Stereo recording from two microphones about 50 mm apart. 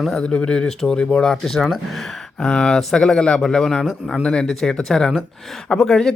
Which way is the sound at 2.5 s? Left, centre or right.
Centre.